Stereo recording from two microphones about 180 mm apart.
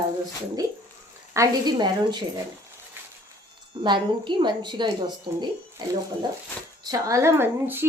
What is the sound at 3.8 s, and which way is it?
A woman's voice, 25° right (ahead or behind).